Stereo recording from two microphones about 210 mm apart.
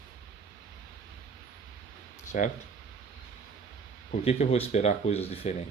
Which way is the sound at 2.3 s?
40° left (ahead or behind).